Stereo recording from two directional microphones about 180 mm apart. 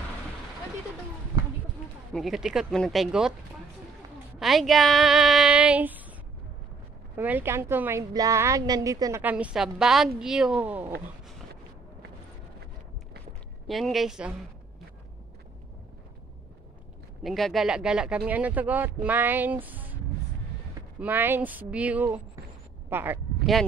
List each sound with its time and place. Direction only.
2.1 s speech: centre (ahead or behind)
4.4 s speech: centre (ahead or behind)
7.2 s a woman's voice: 10° right (ahead or behind)
13.7 s speech: centre (ahead or behind)
17.2 s a woman's voice: centre (ahead or behind)
21.0 s a woman's voice: 10° right (ahead or behind)